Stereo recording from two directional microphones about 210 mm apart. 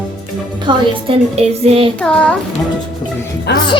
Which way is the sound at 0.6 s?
25° right (ahead or behind).